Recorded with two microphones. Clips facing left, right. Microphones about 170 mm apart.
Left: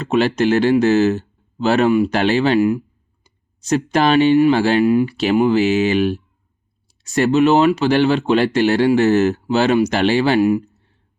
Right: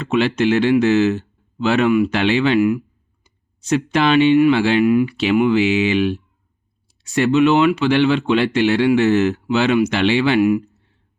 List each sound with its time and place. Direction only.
0.0 s speech: 40° left (ahead or behind)